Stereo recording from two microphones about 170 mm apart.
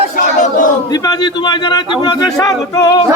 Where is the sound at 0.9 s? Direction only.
25° left (ahead or behind).